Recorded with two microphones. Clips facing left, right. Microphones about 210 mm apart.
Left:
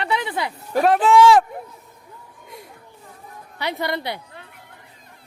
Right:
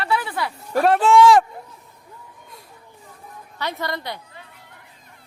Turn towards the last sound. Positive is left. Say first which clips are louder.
# left 3 dB
turn(degrees=10)  # may be behind; listen again after turning